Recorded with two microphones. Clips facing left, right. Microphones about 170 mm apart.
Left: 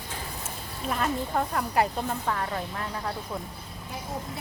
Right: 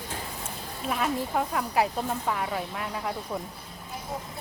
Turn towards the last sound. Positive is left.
turn(degrees=-10)  # may be behind; listen again after turning